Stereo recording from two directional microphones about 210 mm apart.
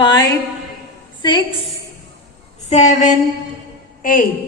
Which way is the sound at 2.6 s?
35° left (ahead or behind).